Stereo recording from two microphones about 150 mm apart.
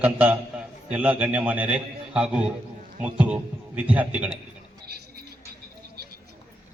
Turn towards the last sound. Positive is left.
turn(degrees=-90)